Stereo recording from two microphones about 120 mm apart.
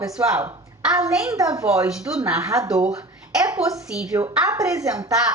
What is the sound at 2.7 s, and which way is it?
Speech, 5° right (ahead or behind).